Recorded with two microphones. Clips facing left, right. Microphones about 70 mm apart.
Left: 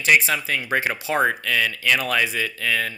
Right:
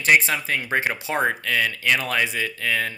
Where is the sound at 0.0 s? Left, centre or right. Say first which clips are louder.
Even; right.